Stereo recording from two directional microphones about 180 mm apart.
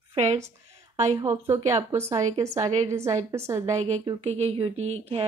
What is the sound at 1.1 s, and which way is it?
A woman's voice, 15° right (ahead or behind).